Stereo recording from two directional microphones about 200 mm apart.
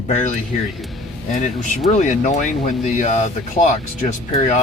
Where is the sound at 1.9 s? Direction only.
35° left (ahead or behind).